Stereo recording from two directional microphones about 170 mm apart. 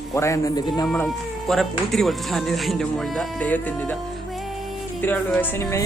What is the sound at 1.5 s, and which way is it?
Speech, centre (ahead or behind).